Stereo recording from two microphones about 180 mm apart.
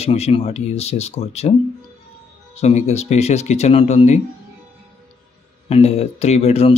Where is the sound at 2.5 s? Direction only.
35° left (ahead or behind).